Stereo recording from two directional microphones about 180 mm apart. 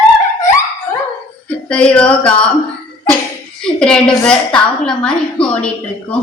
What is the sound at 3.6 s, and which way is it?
A woman's voice, 5° left (ahead or behind).